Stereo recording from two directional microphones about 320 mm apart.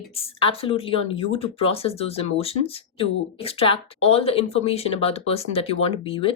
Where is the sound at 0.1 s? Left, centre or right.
Centre.